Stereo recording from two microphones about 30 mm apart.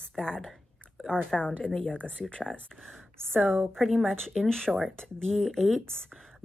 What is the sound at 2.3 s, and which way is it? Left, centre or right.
Speech, left.